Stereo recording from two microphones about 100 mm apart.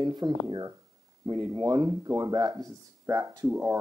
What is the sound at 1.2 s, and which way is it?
Speech, 55° right (ahead or behind).